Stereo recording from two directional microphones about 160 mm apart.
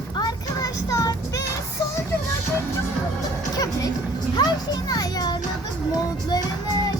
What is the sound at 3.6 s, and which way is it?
Music, 20° left (ahead or behind).